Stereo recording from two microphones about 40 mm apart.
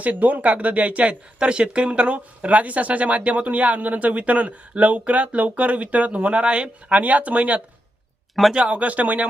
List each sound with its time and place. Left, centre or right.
0.0 s speech: right
8.5 s speech: right